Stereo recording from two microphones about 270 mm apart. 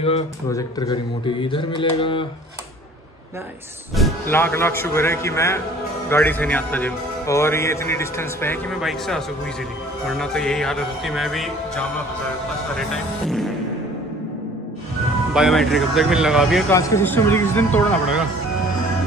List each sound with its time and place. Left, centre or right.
0.0 s speech: centre
3.9 s a man's voice: centre
10.0 s music: centre
15.3 s music: centre
16.7 s a man's voice: centre